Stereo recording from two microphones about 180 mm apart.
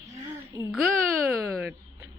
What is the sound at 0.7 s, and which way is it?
Speech, 10° right (ahead or behind).